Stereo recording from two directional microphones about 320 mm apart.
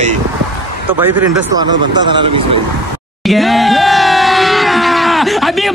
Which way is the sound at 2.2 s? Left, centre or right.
Centre.